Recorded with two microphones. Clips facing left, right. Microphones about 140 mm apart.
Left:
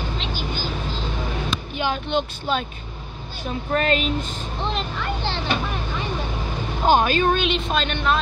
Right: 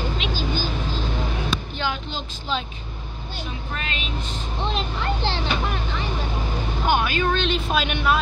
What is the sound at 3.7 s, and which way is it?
Speech, 45° left (ahead or behind).